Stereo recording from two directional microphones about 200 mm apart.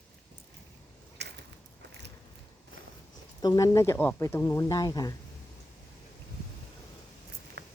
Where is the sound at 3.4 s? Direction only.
15° left (ahead or behind).